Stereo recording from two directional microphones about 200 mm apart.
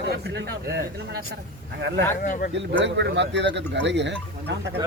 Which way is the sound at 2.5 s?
65° right (ahead or behind).